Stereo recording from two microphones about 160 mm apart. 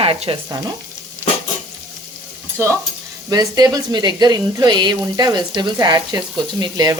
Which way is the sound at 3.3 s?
25° right (ahead or behind).